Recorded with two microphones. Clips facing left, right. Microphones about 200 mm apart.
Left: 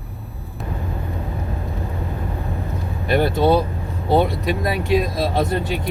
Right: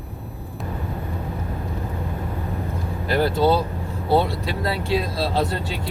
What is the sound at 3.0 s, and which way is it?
Vehicle, 20° left (ahead or behind).